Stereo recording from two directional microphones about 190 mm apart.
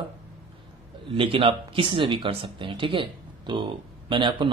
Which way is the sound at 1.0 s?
30° right (ahead or behind).